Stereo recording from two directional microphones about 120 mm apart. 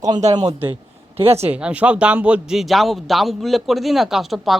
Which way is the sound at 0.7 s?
55° right (ahead or behind).